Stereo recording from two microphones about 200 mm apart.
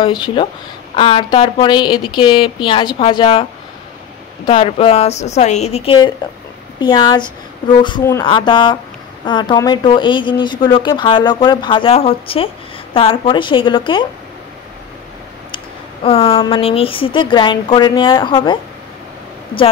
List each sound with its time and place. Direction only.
0.4 s speech: 25° left (ahead or behind)
4.5 s a woman's voice: 25° left (ahead or behind)
15.5 s speech: 25° left (ahead or behind)